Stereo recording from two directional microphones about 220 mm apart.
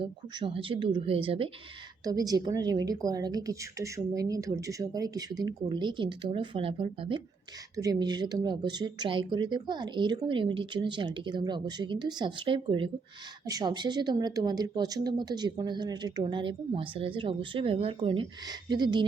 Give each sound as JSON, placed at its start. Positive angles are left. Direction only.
{"t": 0.0, "sound": "a woman's voice", "side_deg": -25}